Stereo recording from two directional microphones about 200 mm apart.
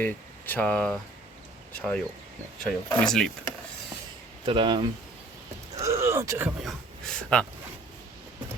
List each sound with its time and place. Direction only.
0.0 s speech: 10° left (ahead or behind)
4.4 s speech: 25° right (ahead or behind)
5.7 s a sound: 15° right (ahead or behind)
6.6 s speech: centre (ahead or behind)